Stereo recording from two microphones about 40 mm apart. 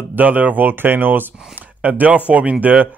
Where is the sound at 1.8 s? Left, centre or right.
Right.